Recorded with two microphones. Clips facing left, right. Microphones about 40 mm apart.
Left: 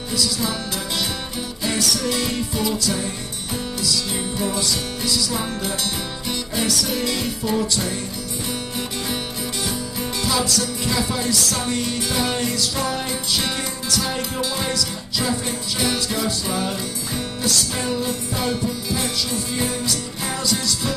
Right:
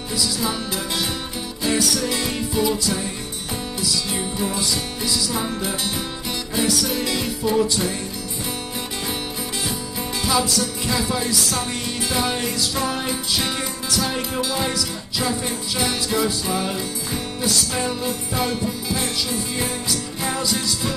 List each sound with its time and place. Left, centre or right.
0.1 s music: centre
10.2 s music: centre
15.2 s music: centre